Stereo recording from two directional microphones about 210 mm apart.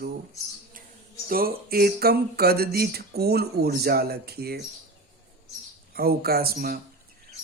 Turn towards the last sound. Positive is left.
turn(degrees=-45)  # may be behind; listen again after turning